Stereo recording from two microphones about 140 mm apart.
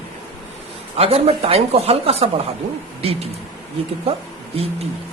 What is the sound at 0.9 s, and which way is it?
Speech, 45° right (ahead or behind).